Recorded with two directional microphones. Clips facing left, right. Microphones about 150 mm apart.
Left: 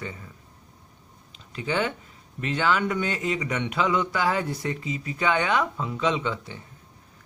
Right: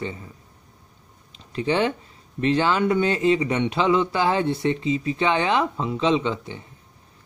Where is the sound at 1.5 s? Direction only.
30° right (ahead or behind).